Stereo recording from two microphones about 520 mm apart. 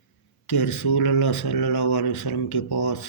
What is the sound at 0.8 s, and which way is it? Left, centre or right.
Speech, left.